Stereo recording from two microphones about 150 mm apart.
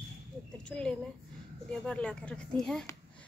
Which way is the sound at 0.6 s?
5° left (ahead or behind).